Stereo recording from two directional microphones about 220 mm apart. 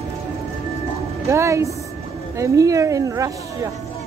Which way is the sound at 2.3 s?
15° right (ahead or behind).